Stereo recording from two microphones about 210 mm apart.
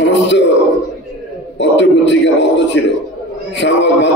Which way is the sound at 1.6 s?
60° left (ahead or behind).